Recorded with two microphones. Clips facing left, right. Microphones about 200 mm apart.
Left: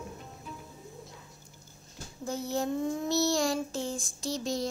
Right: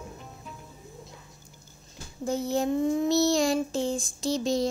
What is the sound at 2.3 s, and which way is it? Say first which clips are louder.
Child singing: right 5 dB; 20° right (ahead or behind).